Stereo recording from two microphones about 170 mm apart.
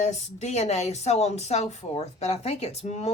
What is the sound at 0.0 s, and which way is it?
Speech, 40° left (ahead or behind).